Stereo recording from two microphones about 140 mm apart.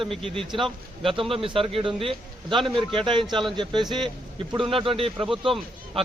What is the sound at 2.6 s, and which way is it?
Speech, centre (ahead or behind).